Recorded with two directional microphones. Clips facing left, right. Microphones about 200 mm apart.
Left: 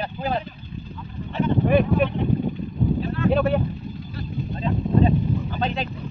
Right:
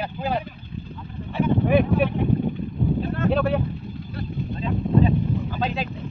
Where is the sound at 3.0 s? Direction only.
50° right (ahead or behind).